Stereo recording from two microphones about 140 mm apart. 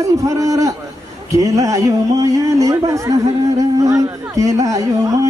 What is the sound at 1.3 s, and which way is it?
Speech, 25° right (ahead or behind).